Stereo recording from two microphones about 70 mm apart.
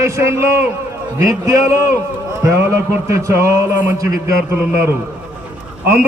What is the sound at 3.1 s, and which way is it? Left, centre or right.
Speech, right.